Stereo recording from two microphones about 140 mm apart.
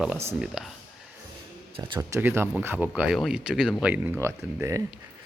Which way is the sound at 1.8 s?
25° right (ahead or behind).